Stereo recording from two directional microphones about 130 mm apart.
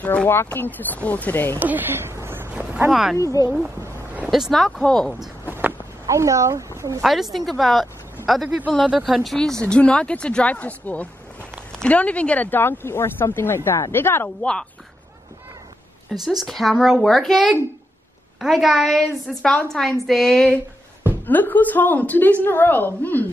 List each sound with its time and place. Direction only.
0.0 s a woman's voice: 10° left (ahead or behind)
1.6 s speech: 15° right (ahead or behind)
3.2 s speech: 25° left (ahead or behind)
3.8 s a sound: 15° right (ahead or behind)
4.3 s a woman's voice: centre (ahead or behind)
5.4 s a sound: 15° right (ahead or behind)
7.0 s a woman's voice: centre (ahead or behind)
16.1 s a woman's voice: centre (ahead or behind)